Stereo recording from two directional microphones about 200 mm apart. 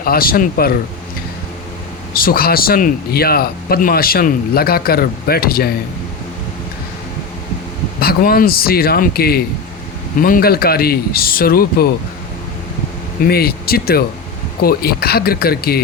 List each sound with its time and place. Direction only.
0.0 s speech: 45° left (ahead or behind)
2.1 s speech: 45° left (ahead or behind)
7.9 s speech: 50° left (ahead or behind)
13.2 s speech: 50° left (ahead or behind)